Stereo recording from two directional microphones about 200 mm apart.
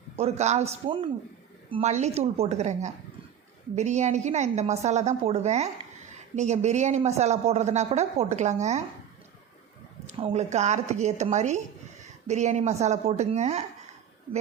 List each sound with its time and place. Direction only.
0.2 s speech: 35° right (ahead or behind)
10.1 s speech: 30° right (ahead or behind)